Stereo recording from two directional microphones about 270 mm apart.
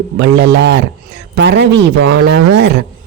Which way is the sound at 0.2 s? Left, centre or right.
Right.